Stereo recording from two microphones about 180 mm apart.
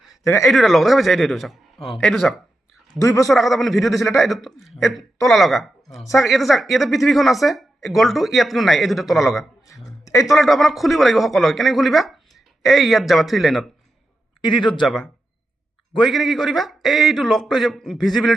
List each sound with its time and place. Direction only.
0.4 s a woman's voice: centre (ahead or behind)
3.0 s a man's voice: 15° left (ahead or behind)
3.2 s a woman's voice: centre (ahead or behind)
10.0 s a sound: 15° left (ahead or behind)
10.2 s a woman's voice: centre (ahead or behind)
14.4 s speech: 25° left (ahead or behind)
14.8 s a woman's voice: centre (ahead or behind)